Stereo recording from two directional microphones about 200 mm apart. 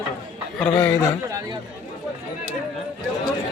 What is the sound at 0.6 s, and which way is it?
Speech, 10° left (ahead or behind).